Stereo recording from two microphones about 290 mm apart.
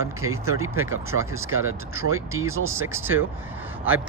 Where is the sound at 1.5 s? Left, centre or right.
Right.